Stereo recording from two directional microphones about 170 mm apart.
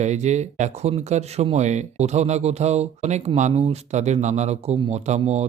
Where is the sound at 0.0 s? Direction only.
40° right (ahead or behind).